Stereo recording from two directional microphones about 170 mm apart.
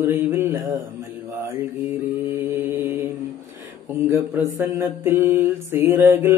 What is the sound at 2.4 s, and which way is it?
Mantra, 10° right (ahead or behind).